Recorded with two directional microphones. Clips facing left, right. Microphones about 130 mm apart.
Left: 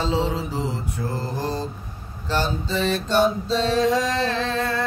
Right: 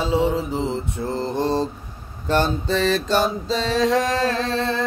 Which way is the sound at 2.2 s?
55° right (ahead or behind).